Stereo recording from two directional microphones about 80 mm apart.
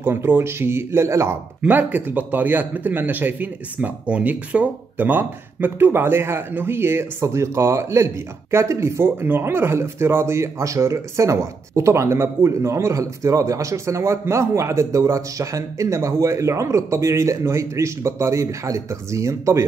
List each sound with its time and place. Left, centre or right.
0.0 s a man's voice: right
1.6 s a man's voice: right